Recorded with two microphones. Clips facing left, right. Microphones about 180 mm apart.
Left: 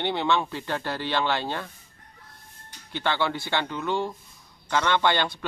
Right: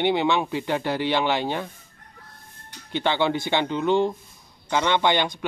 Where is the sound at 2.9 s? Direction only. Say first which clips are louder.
Right 4 dB; 20° right (ahead or behind).